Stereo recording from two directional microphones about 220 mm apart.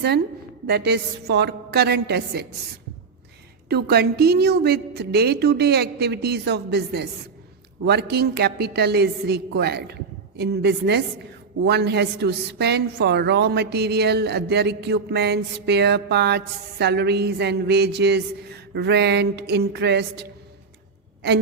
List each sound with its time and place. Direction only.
0.7 s a woman's voice: 50° right (ahead or behind)
3.7 s a woman's voice: 45° right (ahead or behind)